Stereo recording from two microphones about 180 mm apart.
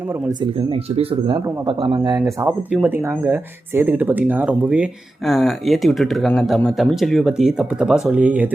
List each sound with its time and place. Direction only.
0.3 s speech: 35° right (ahead or behind); by 8.4 s 10° right (ahead or behind)